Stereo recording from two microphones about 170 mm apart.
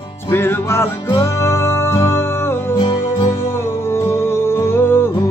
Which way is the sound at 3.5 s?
15° left (ahead or behind).